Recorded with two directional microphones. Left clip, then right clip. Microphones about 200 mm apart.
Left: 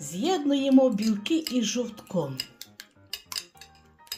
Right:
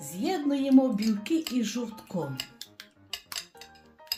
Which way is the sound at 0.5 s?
25° left (ahead or behind).